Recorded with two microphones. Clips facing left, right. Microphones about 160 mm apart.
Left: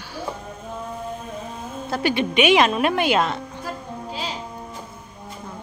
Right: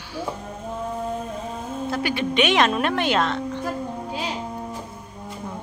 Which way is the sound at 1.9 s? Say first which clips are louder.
Left 4 dB; 30° left (ahead or behind).